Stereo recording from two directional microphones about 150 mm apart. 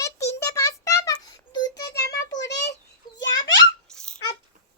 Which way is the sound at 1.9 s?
90° left.